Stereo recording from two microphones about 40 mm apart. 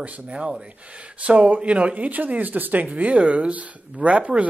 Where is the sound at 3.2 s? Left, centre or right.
Right.